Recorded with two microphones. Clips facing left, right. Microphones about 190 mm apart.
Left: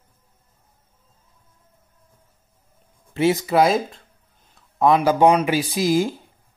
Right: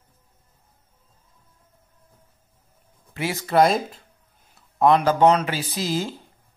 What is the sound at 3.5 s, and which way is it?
Speech, centre (ahead or behind).